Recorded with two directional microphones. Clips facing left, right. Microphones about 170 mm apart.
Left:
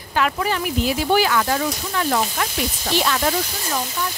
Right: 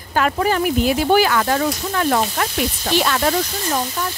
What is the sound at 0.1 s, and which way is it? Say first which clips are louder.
Speech: right 3 dB; 45° right (ahead or behind).